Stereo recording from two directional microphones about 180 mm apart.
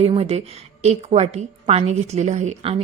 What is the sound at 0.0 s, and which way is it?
A woman's voice, 30° right (ahead or behind).